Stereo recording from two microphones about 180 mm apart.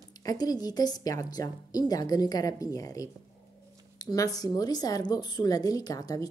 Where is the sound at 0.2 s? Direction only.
20° left (ahead or behind).